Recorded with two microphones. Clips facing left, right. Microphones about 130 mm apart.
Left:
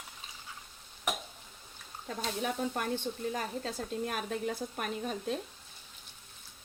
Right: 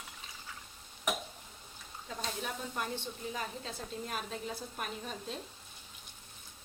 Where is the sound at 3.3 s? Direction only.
45° left (ahead or behind).